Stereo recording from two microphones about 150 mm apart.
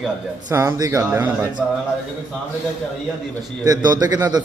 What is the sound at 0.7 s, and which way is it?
Speech, 25° right (ahead or behind).